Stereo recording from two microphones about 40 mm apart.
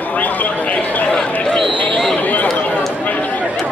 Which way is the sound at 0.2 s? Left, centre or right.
Left.